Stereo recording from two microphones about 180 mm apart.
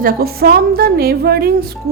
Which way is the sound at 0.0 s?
55° right (ahead or behind).